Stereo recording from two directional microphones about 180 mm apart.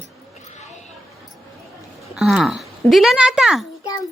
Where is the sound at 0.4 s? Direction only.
40° left (ahead or behind).